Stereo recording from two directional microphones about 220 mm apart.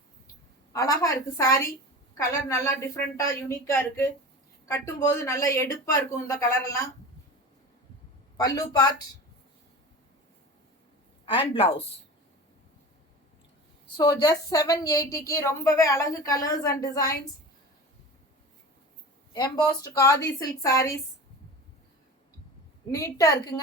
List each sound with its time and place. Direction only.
0.7 s a woman's voice: 15° left (ahead or behind)
8.4 s a woman's voice: 15° left (ahead or behind)
11.3 s a woman's voice: 25° left (ahead or behind)
13.9 s a woman's voice: 20° left (ahead or behind)
19.3 s a woman's voice: 15° left (ahead or behind)
22.9 s a woman's voice: 15° left (ahead or behind)